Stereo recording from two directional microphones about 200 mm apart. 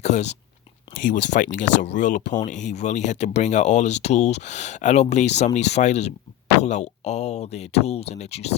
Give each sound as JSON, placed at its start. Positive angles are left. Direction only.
{"t": 0.0, "sound": "speech", "side_deg": 35}